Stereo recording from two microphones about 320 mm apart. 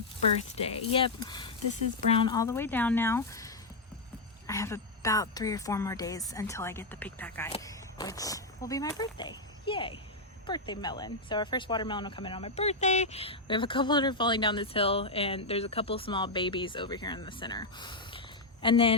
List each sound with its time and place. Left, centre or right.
0.5 s speech: centre